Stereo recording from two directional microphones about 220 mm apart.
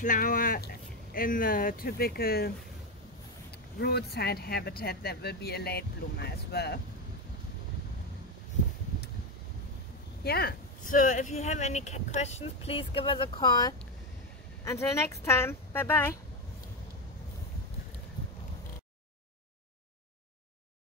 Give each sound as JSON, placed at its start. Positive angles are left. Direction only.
{"t": 0.0, "sound": "speech", "side_deg": 35}
{"t": 3.8, "sound": "speech", "side_deg": 45}
{"t": 10.2, "sound": "speech", "side_deg": 45}